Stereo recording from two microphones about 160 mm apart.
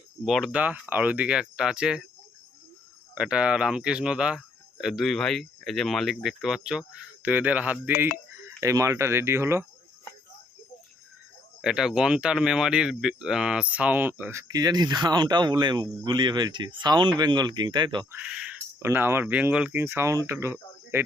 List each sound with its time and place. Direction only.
0.3 s speech: centre (ahead or behind)
3.2 s speech: 5° right (ahead or behind)
7.9 s speech: 60° left (ahead or behind)
8.4 s speech: 20° right (ahead or behind)
11.6 s speech: 5° right (ahead or behind); by 18.0 s 30° right (ahead or behind)
18.1 s speech: 5° right (ahead or behind)